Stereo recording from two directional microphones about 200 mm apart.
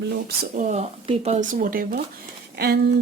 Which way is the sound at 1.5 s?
45° right (ahead or behind).